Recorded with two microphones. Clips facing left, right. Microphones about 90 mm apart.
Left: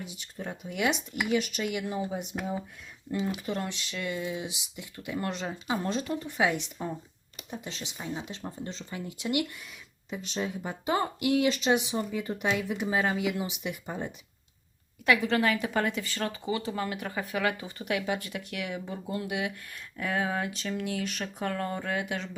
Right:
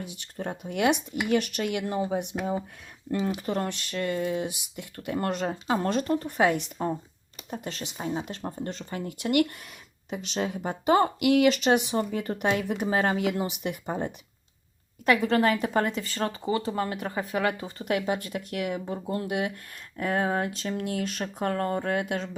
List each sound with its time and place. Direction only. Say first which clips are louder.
0.0 s speech: right 4 dB; 60° right (ahead or behind)
3.3 s speech: right 4 dB; 45° right (ahead or behind)
10.1 s speech: right 3 dB; 75° right (ahead or behind); by 22.3 s 40° right (ahead or behind)